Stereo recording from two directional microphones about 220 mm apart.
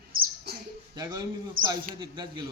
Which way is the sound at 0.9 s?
15° right (ahead or behind).